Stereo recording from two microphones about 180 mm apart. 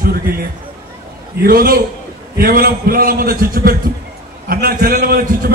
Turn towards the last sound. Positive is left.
turn(degrees=-55)  # may be behind; listen again after turning